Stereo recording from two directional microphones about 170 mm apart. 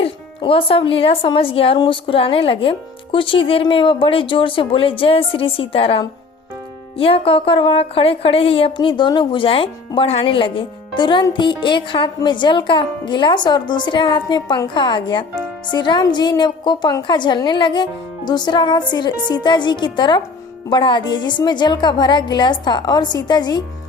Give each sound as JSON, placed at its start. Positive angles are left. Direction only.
{"t": 0.0, "sound": "speech", "side_deg": 30}